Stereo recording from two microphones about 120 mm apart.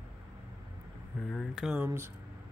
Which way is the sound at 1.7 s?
20° right (ahead or behind).